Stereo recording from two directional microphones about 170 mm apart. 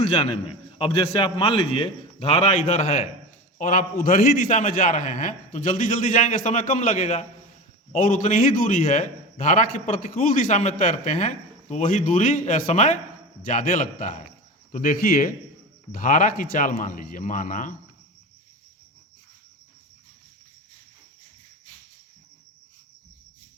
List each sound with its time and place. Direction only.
0.8 s a man's voice: 35° left (ahead or behind); by 17.7 s 50° left (ahead or behind)